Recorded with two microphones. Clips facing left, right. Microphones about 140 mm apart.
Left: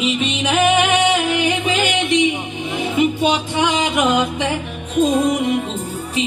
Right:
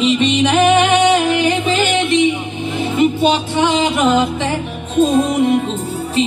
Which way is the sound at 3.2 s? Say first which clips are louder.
Right 3 dB; 10° left (ahead or behind).